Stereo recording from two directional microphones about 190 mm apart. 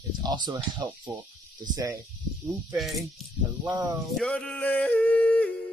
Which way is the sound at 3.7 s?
20° right (ahead or behind).